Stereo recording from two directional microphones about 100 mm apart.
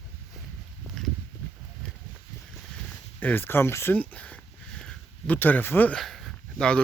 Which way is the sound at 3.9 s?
15° left (ahead or behind).